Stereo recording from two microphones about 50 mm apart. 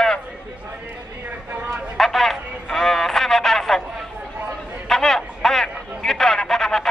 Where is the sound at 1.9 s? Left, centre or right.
Centre.